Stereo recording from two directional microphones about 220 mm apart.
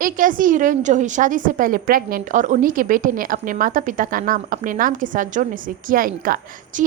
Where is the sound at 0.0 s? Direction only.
40° right (ahead or behind).